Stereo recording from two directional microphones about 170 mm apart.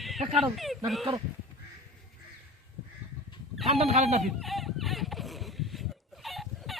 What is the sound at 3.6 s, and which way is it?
Speech, 40° right (ahead or behind).